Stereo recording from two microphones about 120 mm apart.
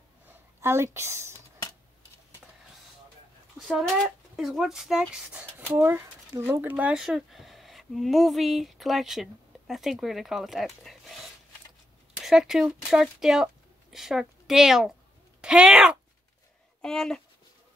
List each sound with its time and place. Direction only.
0.6 s a woman's voice: 20° right (ahead or behind)
3.6 s speech: centre (ahead or behind)
7.0 s speech: 5° right (ahead or behind)
16.8 s speech: 5° left (ahead or behind)